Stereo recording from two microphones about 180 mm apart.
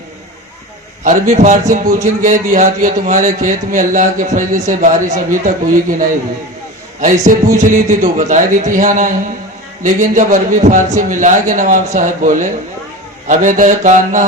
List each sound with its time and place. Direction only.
1.0 s a man's voice: 40° right (ahead or behind)
7.0 s a man's voice: 45° right (ahead or behind)